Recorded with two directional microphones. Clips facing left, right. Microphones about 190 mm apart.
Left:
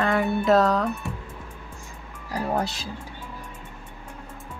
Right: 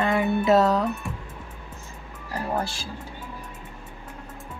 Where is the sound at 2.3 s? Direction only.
15° left (ahead or behind).